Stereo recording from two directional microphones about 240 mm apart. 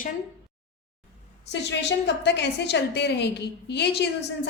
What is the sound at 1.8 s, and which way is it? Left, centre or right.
A woman's voice, left.